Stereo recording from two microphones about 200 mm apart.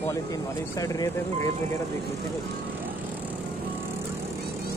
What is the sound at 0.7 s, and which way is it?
Speech, 20° left (ahead or behind).